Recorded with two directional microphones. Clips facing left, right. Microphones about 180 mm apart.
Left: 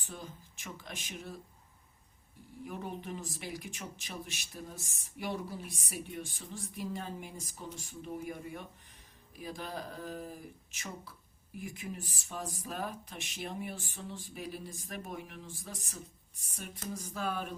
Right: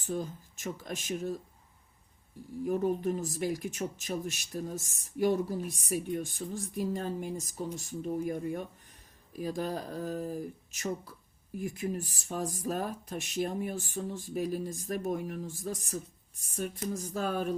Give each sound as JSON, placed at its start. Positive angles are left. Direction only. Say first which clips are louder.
{"t": 0.0, "sound": "speech", "louder": "right 11 dB", "side_deg": -40}
{"t": 2.6, "sound": "speech", "louder": "right 12 dB", "side_deg": -45}
{"t": 9.3, "sound": "speech", "louder": "right 8 dB", "side_deg": -40}